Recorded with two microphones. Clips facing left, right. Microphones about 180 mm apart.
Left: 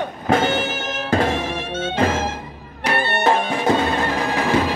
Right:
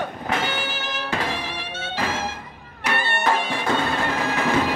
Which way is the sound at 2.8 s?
35° left (ahead or behind).